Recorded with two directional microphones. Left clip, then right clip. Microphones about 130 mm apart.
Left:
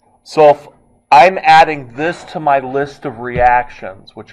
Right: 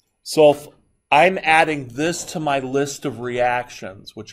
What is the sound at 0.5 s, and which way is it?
A man's voice, 30° right (ahead or behind).